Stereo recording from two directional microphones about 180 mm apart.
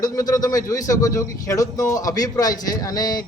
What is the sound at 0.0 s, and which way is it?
Speech, 20° left (ahead or behind).